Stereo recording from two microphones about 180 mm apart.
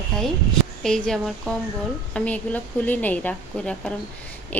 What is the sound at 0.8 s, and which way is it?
A woman's voice, 5° left (ahead or behind).